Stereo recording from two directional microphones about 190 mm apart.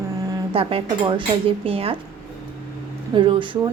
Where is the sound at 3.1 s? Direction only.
25° right (ahead or behind).